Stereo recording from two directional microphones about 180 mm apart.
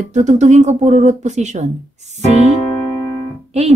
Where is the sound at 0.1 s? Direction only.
40° right (ahead or behind).